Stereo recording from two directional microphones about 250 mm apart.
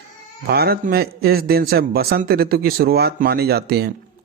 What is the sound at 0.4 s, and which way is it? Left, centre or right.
Speech, right.